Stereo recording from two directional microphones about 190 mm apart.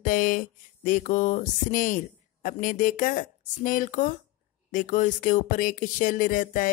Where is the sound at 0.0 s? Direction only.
45° left (ahead or behind).